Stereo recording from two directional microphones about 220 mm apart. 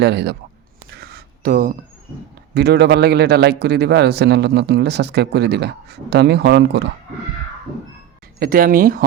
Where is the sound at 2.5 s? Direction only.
50° right (ahead or behind).